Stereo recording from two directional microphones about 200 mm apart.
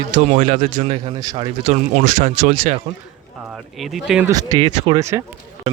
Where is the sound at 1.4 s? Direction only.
35° right (ahead or behind).